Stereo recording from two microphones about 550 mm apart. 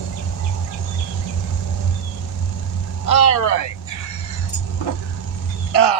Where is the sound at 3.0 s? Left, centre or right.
Left.